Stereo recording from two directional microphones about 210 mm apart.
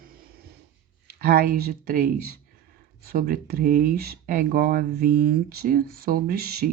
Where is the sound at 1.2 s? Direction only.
45° right (ahead or behind).